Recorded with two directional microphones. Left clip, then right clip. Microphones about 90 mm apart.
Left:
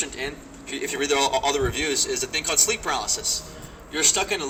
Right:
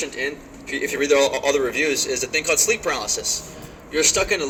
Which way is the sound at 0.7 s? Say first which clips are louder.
Right 5 dB; 30° left (ahead or behind).